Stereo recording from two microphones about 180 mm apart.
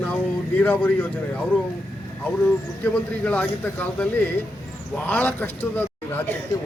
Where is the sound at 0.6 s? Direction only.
10° left (ahead or behind).